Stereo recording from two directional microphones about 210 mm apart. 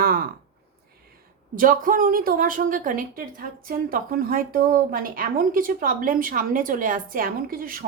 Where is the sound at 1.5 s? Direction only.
40° right (ahead or behind).